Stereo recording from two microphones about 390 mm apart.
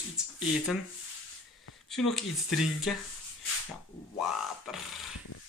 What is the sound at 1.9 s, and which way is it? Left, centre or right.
Speech, centre.